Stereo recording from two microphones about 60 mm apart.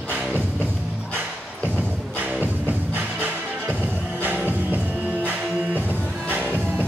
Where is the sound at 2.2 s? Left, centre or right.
Right.